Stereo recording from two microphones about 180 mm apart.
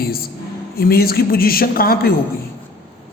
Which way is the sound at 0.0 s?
55° left (ahead or behind).